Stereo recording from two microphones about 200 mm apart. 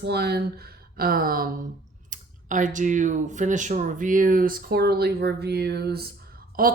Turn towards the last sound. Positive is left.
turn(degrees=-45)  # may be behind; listen again after turning